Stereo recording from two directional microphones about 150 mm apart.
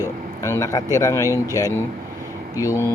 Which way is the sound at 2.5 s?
20° left (ahead or behind).